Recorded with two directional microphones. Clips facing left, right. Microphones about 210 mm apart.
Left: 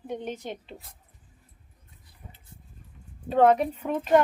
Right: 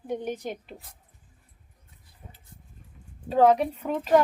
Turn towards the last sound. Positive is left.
turn(degrees=0)  # may be behind; listen again after turning